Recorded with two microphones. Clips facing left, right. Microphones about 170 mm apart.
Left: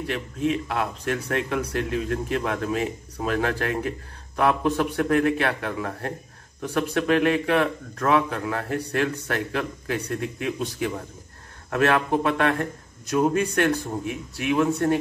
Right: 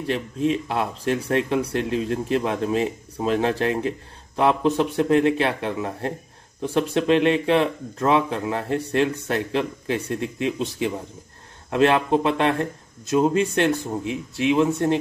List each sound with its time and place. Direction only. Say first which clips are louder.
0.0 s speech: right 3 dB; 30° right (ahead or behind)